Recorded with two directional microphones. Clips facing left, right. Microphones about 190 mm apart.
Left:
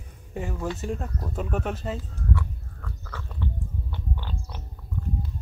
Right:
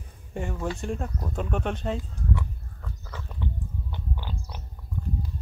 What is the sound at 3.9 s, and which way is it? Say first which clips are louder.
Pig: even; 15° right (ahead or behind).